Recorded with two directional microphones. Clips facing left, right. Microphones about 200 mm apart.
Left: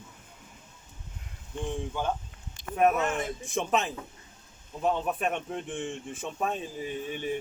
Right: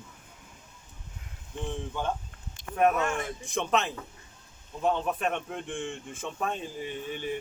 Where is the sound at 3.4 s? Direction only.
Centre (ahead or behind).